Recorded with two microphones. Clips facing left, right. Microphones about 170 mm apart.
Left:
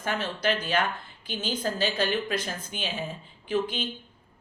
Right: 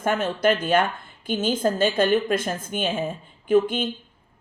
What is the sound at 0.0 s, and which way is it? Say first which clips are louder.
Speech: right 7 dB; 50° right (ahead or behind).